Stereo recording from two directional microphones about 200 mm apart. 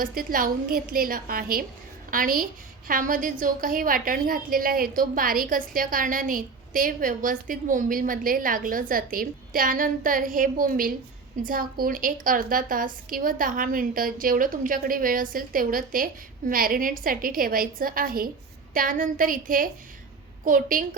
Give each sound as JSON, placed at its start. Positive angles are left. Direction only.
{"t": 0.0, "sound": "a woman's voice", "side_deg": -45}